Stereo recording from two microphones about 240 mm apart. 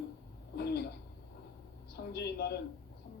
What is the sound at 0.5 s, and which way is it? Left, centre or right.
Speech, left.